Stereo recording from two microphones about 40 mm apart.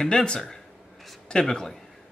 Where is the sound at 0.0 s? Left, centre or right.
Centre.